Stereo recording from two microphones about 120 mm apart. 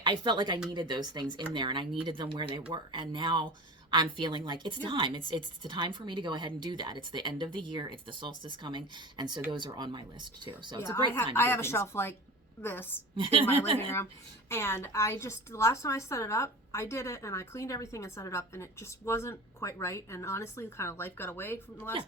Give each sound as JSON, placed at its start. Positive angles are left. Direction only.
{"t": 0.0, "sound": "a woman's voice", "side_deg": -40}
{"t": 10.8, "sound": "a woman's voice", "side_deg": 20}
{"t": 13.1, "sound": "speech", "side_deg": -50}
{"t": 13.7, "sound": "a woman's voice", "side_deg": 20}